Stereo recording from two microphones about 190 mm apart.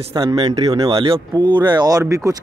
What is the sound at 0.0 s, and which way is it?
Speech, 20° right (ahead or behind).